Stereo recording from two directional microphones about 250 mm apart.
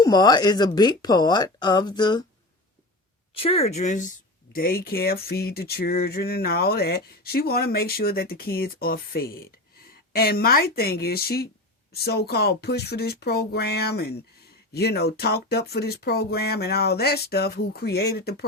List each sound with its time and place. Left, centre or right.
0.0 s speech: centre
3.3 s speech: left